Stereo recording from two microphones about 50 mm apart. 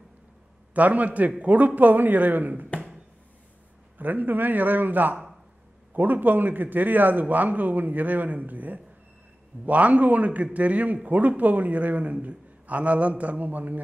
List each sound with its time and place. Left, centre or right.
0.7 s a man's voice: right
4.0 s a man's voice: right